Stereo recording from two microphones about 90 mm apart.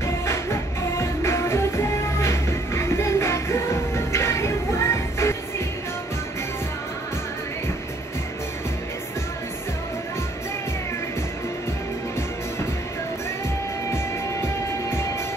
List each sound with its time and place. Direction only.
0.0 s music: 30° left (ahead or behind)
14.4 s music: 30° left (ahead or behind)